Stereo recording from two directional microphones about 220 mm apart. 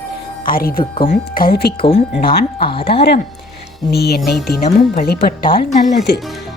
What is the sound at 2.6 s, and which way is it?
Speech, 25° left (ahead or behind).